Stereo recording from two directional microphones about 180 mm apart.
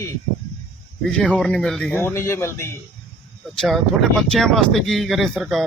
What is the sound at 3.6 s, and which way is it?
Speech, centre (ahead or behind).